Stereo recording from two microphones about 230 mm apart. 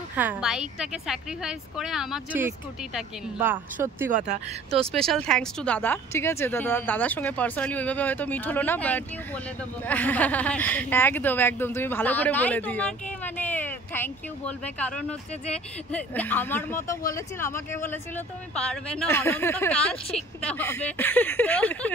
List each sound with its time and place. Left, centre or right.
0.1 s speech: centre
4.9 s speech: centre